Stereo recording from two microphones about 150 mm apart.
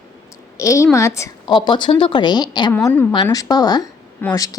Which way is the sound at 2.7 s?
15° left (ahead or behind).